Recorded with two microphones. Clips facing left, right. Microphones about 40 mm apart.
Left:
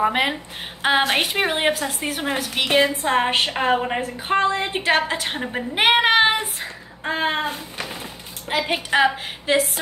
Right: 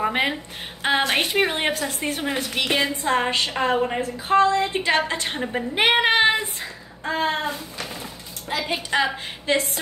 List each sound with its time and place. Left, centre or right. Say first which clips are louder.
0.0 s a woman's voice: left 2 dB; centre
3.3 s a woman's voice: left 2 dB; left
4.8 s a woman's voice: left 2 dB; centre; by 7.8 s left
7.9 s a sound: left 1 dB; left
8.9 s a woman's voice: left 5 dB; centre